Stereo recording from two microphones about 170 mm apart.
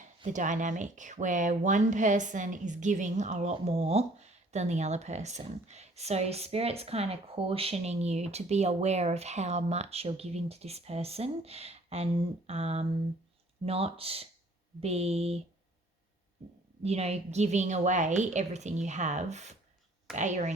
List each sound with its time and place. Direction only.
0.3 s speech: 50° right (ahead or behind)
16.8 s a woman's voice: 40° right (ahead or behind)